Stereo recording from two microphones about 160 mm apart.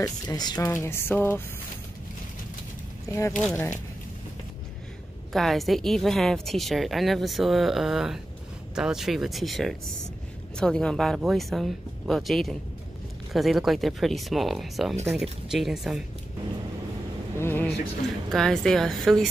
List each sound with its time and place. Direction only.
0.0 s speech: 25° left (ahead or behind)
0.7 s a sound: 15° left (ahead or behind)
3.1 s speech: 20° left (ahead or behind)
5.3 s a woman's voice: centre (ahead or behind)
17.4 s a sound: 15° left (ahead or behind)
18.3 s a woman's voice: 5° left (ahead or behind)